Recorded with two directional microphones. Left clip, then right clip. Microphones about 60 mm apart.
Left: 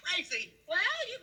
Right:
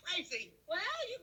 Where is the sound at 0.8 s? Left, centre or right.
Left.